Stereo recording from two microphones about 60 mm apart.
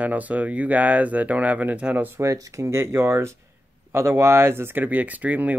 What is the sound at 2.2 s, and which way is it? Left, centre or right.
Speech, right.